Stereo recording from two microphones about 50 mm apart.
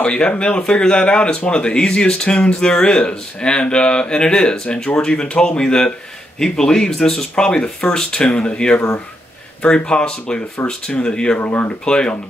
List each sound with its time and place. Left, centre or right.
0.0 s speech: left
9.8 s speech: centre